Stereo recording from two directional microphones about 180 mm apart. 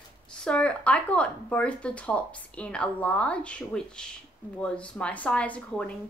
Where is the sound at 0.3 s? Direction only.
5° left (ahead or behind).